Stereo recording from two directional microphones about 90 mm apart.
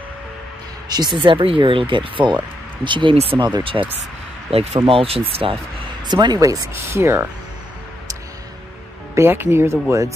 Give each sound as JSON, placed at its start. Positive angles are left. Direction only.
{"t": 0.8, "sound": "speech", "side_deg": -50}
{"t": 4.5, "sound": "speech", "side_deg": -90}
{"t": 6.2, "sound": "speech", "side_deg": -45}
{"t": 6.7, "sound": "speech", "side_deg": -30}
{"t": 9.1, "sound": "speech", "side_deg": -30}